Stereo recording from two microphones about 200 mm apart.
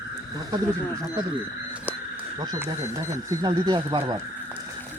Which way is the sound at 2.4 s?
10° right (ahead or behind).